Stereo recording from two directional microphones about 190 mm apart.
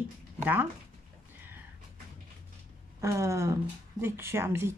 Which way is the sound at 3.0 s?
15° right (ahead or behind).